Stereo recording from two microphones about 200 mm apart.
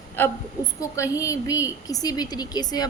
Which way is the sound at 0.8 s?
15° left (ahead or behind).